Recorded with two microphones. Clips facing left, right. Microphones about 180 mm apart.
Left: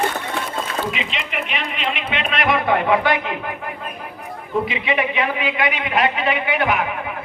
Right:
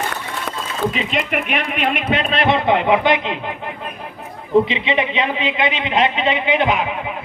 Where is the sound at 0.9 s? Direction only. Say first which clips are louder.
Right 6 dB; 45° right (ahead or behind); by 3.4 s 20° right (ahead or behind).